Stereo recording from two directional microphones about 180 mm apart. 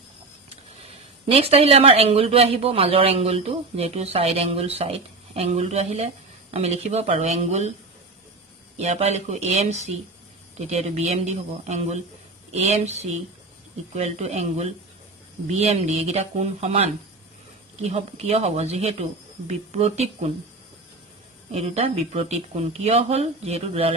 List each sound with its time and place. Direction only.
0.5 s speech: 35° right (ahead or behind)
8.7 s speech: 35° right (ahead or behind)
21.5 s speech: 35° right (ahead or behind)